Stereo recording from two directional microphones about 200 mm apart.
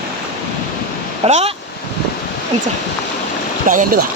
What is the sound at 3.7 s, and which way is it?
Speech, 40° right (ahead or behind).